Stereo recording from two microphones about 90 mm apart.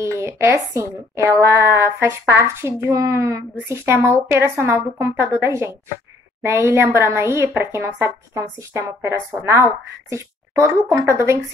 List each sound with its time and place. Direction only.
0.0 s a woman's voice: 35° right (ahead or behind)